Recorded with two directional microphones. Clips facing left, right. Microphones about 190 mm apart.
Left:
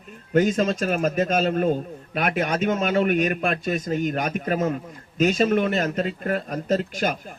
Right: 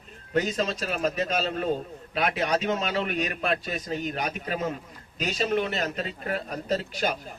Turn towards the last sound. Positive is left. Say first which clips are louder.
# left 4 dB
turn(degrees=50)  # may be behind; listen again after turning